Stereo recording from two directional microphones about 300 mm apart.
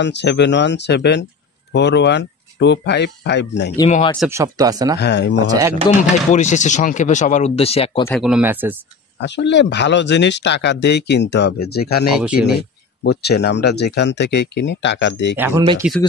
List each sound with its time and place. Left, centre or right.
0.0 s speech: left
3.9 s speech: centre
4.2 s speech: centre
4.9 s speech: left
5.5 s speech: centre
6.3 s speech: left
8.1 s speech: centre
9.2 s speech: left
15.3 s speech: centre